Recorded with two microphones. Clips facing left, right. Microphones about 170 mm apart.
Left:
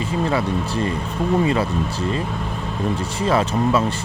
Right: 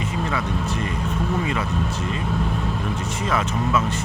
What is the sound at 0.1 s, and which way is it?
Speech, 30° left (ahead or behind).